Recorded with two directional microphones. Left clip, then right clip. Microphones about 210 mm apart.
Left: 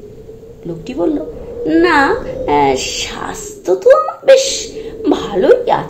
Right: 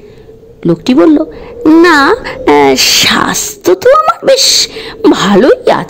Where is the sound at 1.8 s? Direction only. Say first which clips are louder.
Right 4 dB; 60° right (ahead or behind).